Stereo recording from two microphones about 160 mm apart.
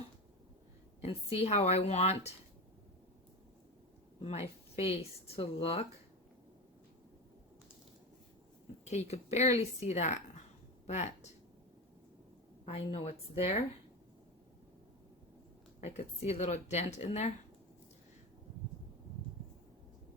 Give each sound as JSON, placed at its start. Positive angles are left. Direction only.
{"t": 1.0, "sound": "speech", "side_deg": 40}
{"t": 4.2, "sound": "speech", "side_deg": 40}
{"t": 8.8, "sound": "speech", "side_deg": 45}
{"t": 12.6, "sound": "speech", "side_deg": 35}
{"t": 15.8, "sound": "speech", "side_deg": 40}